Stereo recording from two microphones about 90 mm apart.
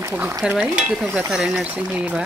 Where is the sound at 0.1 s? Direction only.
25° right (ahead or behind).